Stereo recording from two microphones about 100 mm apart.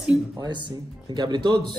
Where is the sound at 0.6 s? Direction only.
45° right (ahead or behind).